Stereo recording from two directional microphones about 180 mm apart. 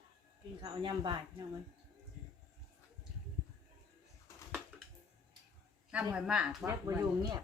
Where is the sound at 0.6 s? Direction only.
25° right (ahead or behind).